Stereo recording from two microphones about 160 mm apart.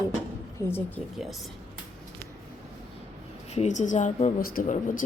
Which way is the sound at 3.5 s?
45° left (ahead or behind).